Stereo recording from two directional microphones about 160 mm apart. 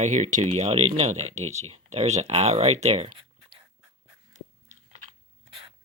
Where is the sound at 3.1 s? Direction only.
30° right (ahead or behind).